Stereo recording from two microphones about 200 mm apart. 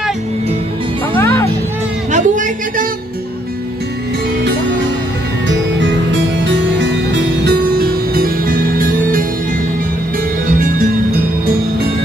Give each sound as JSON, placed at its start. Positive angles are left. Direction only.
{"t": 1.1, "sound": "music", "side_deg": 15}
{"t": 2.1, "sound": "a sound", "side_deg": -40}
{"t": 5.5, "sound": "music", "side_deg": -65}
{"t": 10.6, "sound": "music", "side_deg": -45}